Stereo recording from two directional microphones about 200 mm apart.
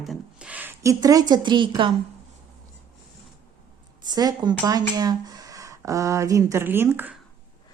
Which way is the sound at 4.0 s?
20° right (ahead or behind).